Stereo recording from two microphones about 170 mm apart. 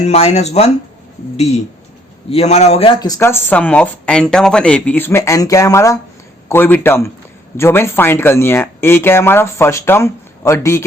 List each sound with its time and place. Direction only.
0.0 s speech: 40° left (ahead or behind)
2.3 s speech: 40° left (ahead or behind)
3.0 s speech: 15° left (ahead or behind)